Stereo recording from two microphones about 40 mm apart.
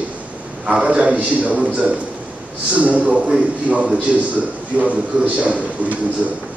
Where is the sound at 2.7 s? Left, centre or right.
Right.